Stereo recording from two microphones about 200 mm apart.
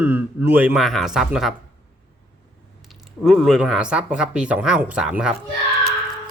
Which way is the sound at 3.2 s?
Centre (ahead or behind).